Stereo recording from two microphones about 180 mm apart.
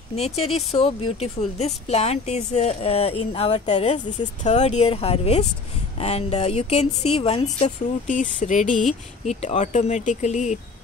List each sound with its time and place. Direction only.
0.1 s speech: 35° left (ahead or behind)